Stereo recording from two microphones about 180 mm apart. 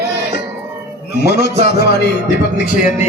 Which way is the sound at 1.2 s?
65° left (ahead or behind).